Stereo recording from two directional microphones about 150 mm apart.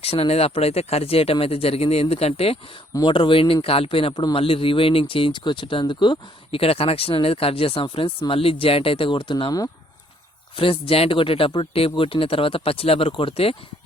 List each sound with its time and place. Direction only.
0.0 s a man's voice: 40° left (ahead or behind)
2.9 s a man's voice: 30° left (ahead or behind)
10.6 s a man's voice: 40° left (ahead or behind)